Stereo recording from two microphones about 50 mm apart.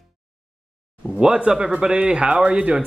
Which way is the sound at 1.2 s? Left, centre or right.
Centre.